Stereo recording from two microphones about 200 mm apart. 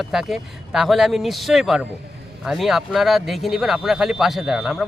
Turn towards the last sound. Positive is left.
turn(degrees=0)  # may be behind; listen again after turning